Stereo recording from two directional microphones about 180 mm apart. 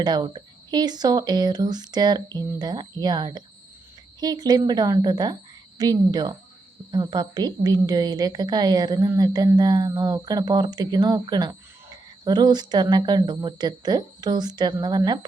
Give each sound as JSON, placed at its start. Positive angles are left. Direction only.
{"t": 0.0, "sound": "a woman's voice", "side_deg": -25}